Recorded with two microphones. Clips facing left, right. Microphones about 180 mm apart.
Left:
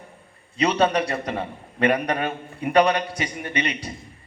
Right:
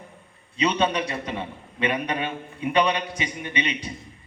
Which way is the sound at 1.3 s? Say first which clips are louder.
Left 3 dB; 40° left (ahead or behind).